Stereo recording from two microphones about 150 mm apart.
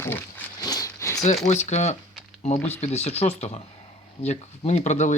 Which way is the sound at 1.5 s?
50° left (ahead or behind).